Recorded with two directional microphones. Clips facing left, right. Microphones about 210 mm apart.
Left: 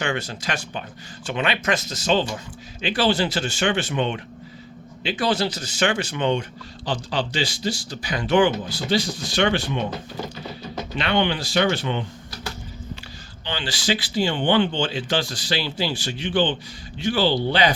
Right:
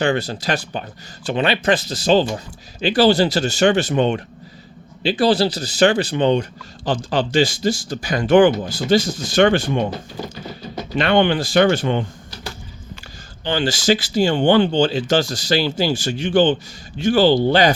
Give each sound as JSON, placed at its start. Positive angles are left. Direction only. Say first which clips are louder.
{"t": 0.0, "sound": "speech", "louder": "right 7 dB", "side_deg": -35}
{"t": 6.8, "sound": "speech", "louder": "right 6 dB", "side_deg": -50}
{"t": 10.9, "sound": "speech", "louder": "right 7 dB", "side_deg": -50}
{"t": 13.4, "sound": "speech", "louder": "right 8 dB", "side_deg": -45}